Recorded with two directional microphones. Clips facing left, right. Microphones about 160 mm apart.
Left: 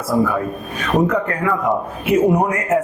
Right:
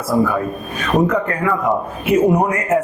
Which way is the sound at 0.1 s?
25° right (ahead or behind).